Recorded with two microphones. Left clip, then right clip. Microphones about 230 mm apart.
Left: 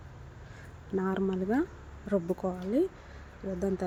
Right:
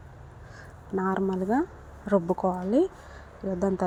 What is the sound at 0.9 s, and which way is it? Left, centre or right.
A woman's voice, centre.